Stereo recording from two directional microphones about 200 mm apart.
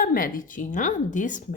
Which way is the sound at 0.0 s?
45° left (ahead or behind).